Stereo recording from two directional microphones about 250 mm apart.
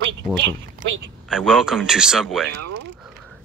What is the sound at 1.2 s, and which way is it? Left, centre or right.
Speech, centre.